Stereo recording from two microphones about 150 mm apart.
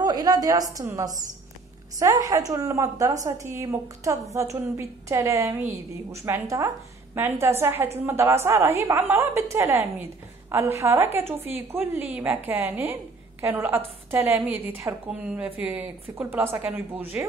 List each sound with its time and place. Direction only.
0.0 s a woman's voice: 25° right (ahead or behind)